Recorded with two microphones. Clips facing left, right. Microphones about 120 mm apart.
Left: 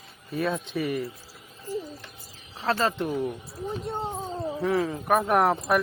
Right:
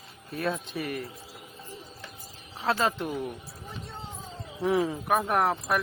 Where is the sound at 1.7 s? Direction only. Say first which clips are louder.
Left 14 dB; 90° left.